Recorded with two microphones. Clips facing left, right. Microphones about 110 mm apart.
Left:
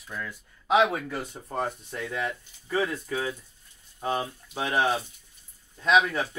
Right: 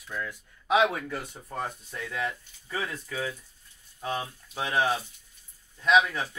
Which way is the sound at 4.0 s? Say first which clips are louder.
Left 3 dB; 35° left (ahead or behind).